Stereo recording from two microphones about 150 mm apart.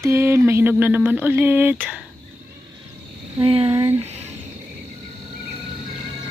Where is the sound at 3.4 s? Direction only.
40° right (ahead or behind).